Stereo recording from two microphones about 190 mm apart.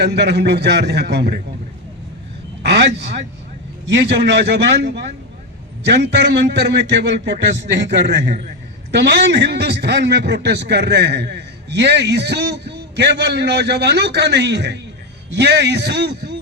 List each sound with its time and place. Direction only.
0.0 s a man's voice: 60° right (ahead or behind)
2.6 s a man's voice: 60° right (ahead or behind)